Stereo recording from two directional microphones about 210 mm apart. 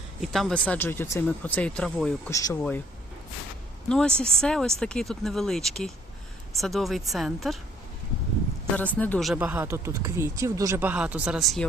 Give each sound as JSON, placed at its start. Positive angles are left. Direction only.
{"t": 0.2, "sound": "speech", "side_deg": 0}
{"t": 2.3, "sound": "speech", "side_deg": 15}
{"t": 3.8, "sound": "speech", "side_deg": 5}
{"t": 8.7, "sound": "speech", "side_deg": 5}